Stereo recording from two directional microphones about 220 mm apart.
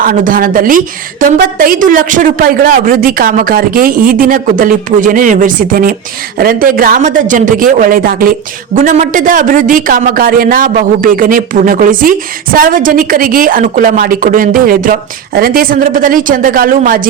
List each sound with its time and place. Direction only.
0.0 s a man's voice: 40° right (ahead or behind)